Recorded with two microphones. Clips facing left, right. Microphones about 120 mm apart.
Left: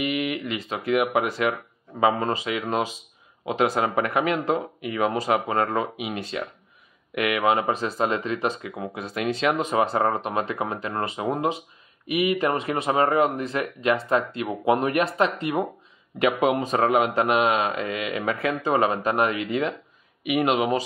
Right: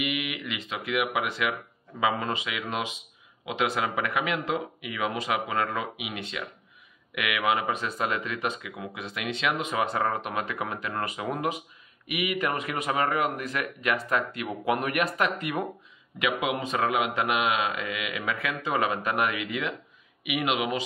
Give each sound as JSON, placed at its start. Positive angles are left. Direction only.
{"t": 0.0, "sound": "speech", "side_deg": 40}
{"t": 16.2, "sound": "speech", "side_deg": 40}